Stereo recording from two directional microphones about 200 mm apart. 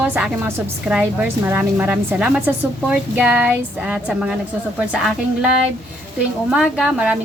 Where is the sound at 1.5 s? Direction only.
10° right (ahead or behind).